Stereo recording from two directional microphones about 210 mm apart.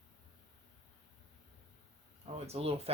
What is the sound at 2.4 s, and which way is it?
Speech, 30° right (ahead or behind).